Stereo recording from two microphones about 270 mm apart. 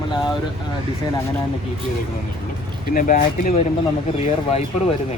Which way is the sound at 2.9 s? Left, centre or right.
Left.